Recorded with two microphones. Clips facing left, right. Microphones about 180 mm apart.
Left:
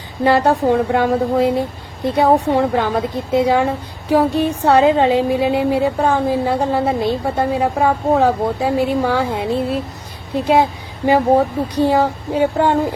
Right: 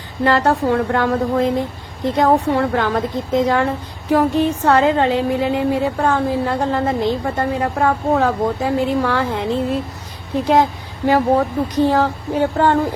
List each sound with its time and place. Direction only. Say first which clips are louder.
0.3 s speech: left 2 dB; 15° left (ahead or behind)